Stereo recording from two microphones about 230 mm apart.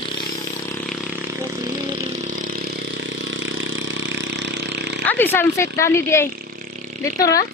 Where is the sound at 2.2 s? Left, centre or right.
Right.